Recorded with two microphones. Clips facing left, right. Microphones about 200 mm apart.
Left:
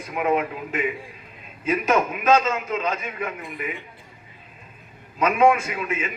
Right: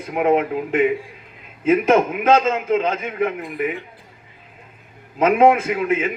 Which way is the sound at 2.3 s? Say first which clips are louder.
Right 3 dB; 20° right (ahead or behind).